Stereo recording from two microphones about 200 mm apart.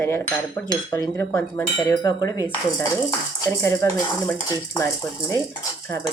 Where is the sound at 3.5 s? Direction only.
15° left (ahead or behind).